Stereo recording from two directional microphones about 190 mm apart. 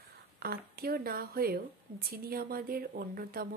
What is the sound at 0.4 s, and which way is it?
Speech, 55° right (ahead or behind).